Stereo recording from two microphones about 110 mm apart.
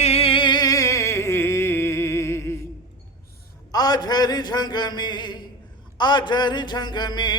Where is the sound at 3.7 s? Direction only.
35° left (ahead or behind).